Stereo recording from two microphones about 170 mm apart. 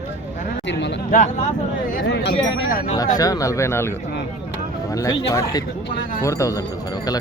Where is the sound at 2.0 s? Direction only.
90° left; by 2.8 s 70° left (ahead or behind).